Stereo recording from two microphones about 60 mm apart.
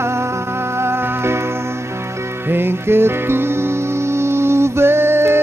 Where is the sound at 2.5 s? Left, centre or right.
Right.